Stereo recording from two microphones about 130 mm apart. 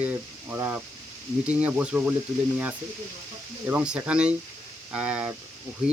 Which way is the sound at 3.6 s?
10° right (ahead or behind).